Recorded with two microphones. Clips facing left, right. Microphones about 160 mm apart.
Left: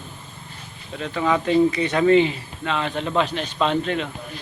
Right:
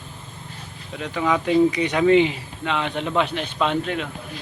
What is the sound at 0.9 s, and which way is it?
Speech, 15° right (ahead or behind).